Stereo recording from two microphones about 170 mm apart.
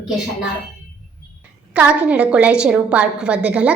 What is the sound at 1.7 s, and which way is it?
A woman's voice, 10° right (ahead or behind).